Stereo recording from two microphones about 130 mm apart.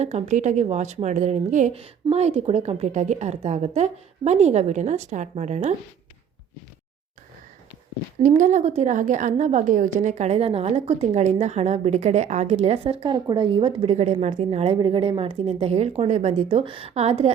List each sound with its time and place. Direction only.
0.0 s a woman's voice: 60° right (ahead or behind)
1.7 s a woman's voice: 50° right (ahead or behind)
8.2 s a woman's voice: 70° right (ahead or behind); by 13.9 s 40° right (ahead or behind)
13.9 s speech: 60° right (ahead or behind)